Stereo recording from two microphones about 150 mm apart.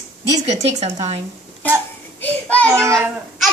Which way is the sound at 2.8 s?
20° right (ahead or behind).